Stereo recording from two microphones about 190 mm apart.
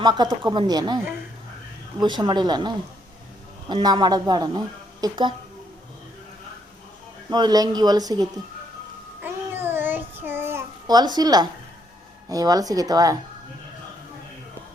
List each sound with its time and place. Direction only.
0.0 s a woman's voice: 20° right (ahead or behind)
7.3 s a woman's voice: 20° right (ahead or behind)
9.2 s child singing: 10° right (ahead or behind)
12.3 s a woman's voice: 20° right (ahead or behind)